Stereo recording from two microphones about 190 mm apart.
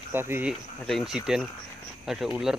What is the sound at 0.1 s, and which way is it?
Speech, 10° right (ahead or behind).